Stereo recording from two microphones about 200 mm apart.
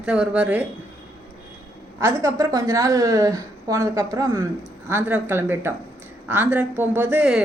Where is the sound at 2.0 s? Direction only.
15° right (ahead or behind).